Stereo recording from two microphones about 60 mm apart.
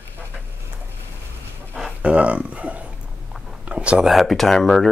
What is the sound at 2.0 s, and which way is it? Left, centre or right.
Speech, right.